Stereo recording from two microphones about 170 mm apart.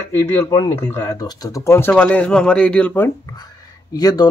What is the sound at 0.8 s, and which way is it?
Speech, 15° left (ahead or behind).